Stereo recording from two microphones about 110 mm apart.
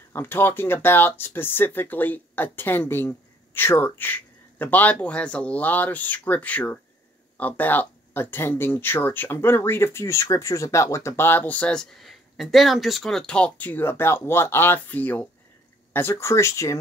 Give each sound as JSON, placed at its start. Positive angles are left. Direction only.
{"t": 0.1, "sound": "speech", "side_deg": 20}